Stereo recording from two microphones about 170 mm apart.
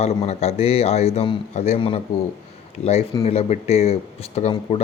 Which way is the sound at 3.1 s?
35° left (ahead or behind).